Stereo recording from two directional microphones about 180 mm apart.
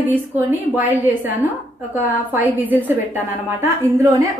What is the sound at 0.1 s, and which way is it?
A woman's voice, 10° right (ahead or behind).